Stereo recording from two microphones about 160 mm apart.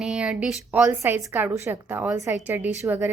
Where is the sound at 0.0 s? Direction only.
5° right (ahead or behind).